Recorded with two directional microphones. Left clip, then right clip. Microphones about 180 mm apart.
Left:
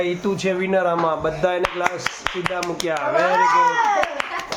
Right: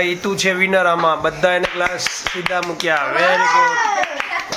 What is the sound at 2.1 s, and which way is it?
Speech, 65° left (ahead or behind).